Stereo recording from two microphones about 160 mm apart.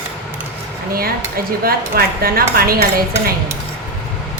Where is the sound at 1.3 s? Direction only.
70° right (ahead or behind).